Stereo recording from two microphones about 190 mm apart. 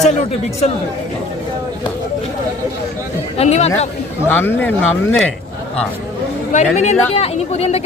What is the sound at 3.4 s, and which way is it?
Speech, 35° left (ahead or behind).